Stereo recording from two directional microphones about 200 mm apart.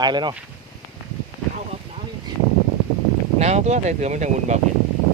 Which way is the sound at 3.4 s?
35° right (ahead or behind).